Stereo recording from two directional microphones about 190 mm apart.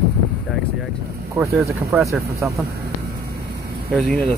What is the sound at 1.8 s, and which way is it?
Speech, 15° right (ahead or behind).